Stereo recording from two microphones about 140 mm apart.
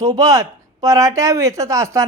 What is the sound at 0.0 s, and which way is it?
Speech, 25° right (ahead or behind).